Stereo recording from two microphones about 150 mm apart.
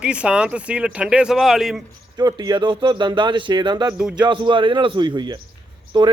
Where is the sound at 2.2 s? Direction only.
25° right (ahead or behind).